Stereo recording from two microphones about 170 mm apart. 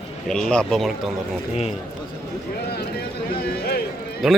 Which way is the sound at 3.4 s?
70° left (ahead or behind).